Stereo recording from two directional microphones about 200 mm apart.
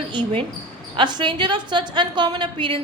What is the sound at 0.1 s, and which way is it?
A woman's voice, 25° right (ahead or behind).